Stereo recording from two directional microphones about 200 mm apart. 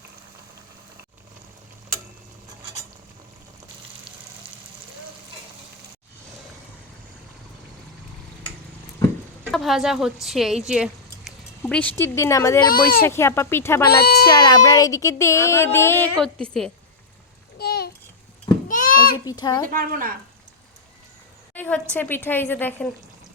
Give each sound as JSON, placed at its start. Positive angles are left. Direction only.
{"t": 9.5, "sound": "a woman's voice", "side_deg": 0}
{"t": 13.8, "sound": "a child's voice", "side_deg": 50}
{"t": 14.3, "sound": "speech", "side_deg": 20}
{"t": 17.6, "sound": "a sound", "side_deg": 55}
{"t": 19.2, "sound": "a child's voice", "side_deg": 20}
{"t": 19.7, "sound": "speech", "side_deg": -45}
{"t": 21.5, "sound": "a sound", "side_deg": 10}
{"t": 21.9, "sound": "speech", "side_deg": 10}